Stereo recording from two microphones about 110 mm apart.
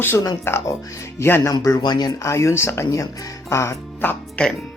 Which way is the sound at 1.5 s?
35° left (ahead or behind).